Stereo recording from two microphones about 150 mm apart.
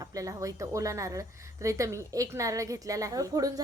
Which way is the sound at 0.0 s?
20° right (ahead or behind).